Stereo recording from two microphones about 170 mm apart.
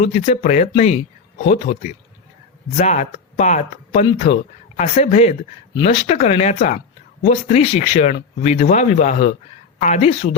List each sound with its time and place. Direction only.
0.0 s speech: 40° left (ahead or behind)